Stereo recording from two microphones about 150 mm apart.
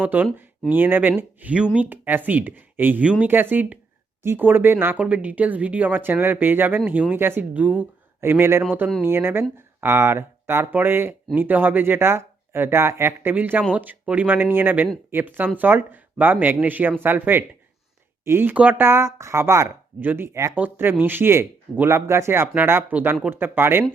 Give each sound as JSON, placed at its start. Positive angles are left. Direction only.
{"t": 0.0, "sound": "speech", "side_deg": -10}